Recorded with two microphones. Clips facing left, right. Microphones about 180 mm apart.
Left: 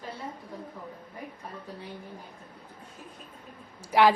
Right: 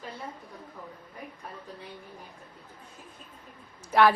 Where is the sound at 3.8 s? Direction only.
10° left (ahead or behind).